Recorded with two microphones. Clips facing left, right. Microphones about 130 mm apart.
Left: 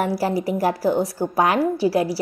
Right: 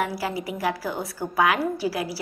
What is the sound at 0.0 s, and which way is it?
A woman's voice, 40° left (ahead or behind).